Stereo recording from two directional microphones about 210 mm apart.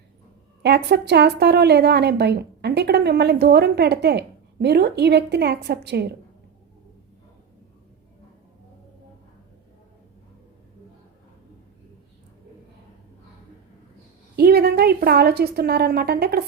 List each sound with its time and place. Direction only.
0.6 s a woman's voice: 50° right (ahead or behind)
14.3 s a woman's voice: 50° right (ahead or behind)